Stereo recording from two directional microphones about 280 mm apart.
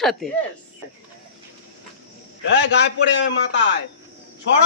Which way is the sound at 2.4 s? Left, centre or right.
Left.